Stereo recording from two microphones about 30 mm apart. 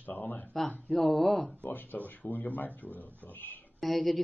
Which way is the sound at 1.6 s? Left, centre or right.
Left.